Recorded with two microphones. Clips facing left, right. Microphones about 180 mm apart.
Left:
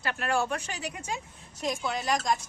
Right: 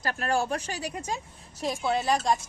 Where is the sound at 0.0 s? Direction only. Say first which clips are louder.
Right 1 dB; 35° right (ahead or behind).